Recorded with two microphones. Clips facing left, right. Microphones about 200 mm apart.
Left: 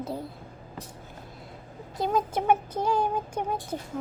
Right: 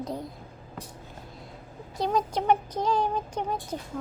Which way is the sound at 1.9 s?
Centre (ahead or behind).